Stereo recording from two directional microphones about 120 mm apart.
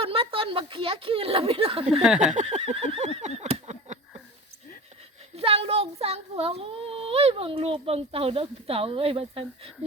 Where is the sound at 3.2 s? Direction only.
65° right (ahead or behind).